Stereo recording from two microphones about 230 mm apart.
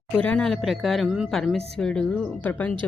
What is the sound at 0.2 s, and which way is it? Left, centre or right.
A woman's voice, centre.